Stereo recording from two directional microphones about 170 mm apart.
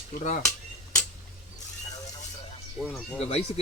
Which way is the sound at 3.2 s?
40° left (ahead or behind).